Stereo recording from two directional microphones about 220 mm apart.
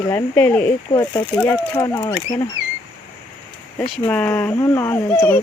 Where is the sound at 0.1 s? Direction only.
10° left (ahead or behind).